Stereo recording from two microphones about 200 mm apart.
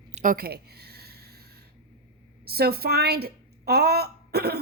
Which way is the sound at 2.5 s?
50° right (ahead or behind).